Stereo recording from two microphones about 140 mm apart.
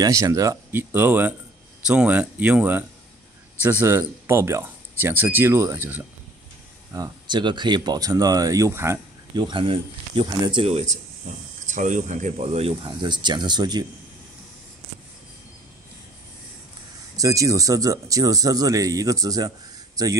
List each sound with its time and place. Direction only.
0.0 s speech: 25° right (ahead or behind)
3.8 s speech: 20° right (ahead or behind)
6.9 s speech: 30° right (ahead or behind)
9.4 s speech: 35° right (ahead or behind)
10.6 s speech: 50° right (ahead or behind)
11.6 s speech: 60° right (ahead or behind)
12.8 s speech: 35° right (ahead or behind)
17.2 s speech: 25° right (ahead or behind)